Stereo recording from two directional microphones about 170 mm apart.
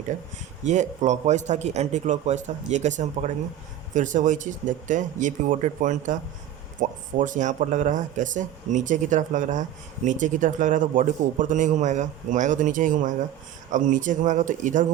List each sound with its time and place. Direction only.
0.6 s speech: 45° right (ahead or behind)